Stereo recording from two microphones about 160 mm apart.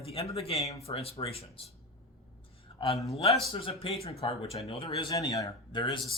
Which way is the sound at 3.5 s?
35° left (ahead or behind).